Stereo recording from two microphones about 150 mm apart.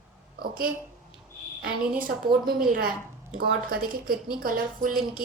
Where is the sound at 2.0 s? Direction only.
70° right (ahead or behind).